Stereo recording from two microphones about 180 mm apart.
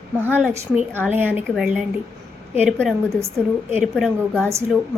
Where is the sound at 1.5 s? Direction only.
5° right (ahead or behind).